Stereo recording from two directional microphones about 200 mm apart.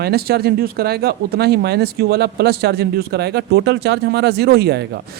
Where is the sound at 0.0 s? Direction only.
50° right (ahead or behind).